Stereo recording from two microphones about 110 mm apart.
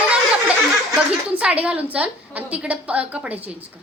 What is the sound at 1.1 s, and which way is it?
A woman's voice, 10° right (ahead or behind).